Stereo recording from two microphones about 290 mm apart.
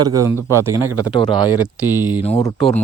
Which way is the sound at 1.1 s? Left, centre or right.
Centre.